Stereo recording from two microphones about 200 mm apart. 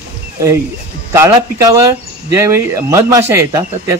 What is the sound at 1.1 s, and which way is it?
Speech, 15° right (ahead or behind).